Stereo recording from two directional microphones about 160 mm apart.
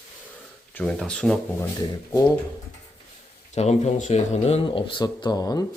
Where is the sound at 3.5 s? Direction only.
40° left (ahead or behind); by 5.7 s 20° left (ahead or behind).